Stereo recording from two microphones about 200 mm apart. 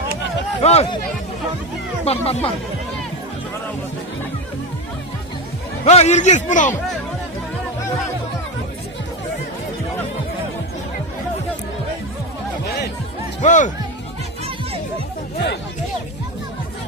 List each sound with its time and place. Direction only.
0.6 s a man's voice: 30° left (ahead or behind)
2.0 s speech: 30° left (ahead or behind)
5.8 s a man's voice: 35° left (ahead or behind)
13.4 s a man's voice: 40° left (ahead or behind)